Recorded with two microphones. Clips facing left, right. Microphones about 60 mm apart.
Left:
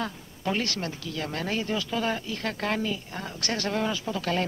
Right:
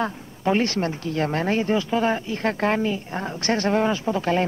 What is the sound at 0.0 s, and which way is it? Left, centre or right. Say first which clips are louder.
Speech: right 7 dB; right.